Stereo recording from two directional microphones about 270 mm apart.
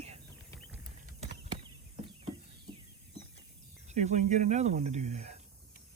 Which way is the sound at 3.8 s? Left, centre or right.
Right.